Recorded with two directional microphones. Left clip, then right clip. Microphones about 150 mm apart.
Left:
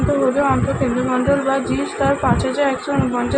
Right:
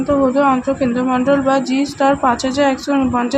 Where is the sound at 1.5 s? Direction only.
25° right (ahead or behind).